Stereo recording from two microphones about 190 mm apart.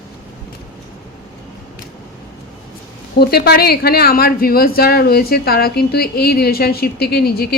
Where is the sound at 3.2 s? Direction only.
55° left (ahead or behind).